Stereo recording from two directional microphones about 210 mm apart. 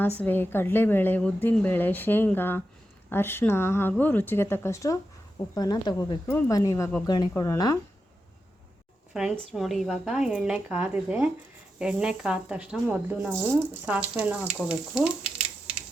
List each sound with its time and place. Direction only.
0.2 s a woman's voice: 10° left (ahead or behind)
9.1 s speech: centre (ahead or behind)